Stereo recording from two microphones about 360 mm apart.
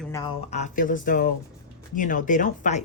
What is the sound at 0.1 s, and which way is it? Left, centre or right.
Speech, centre.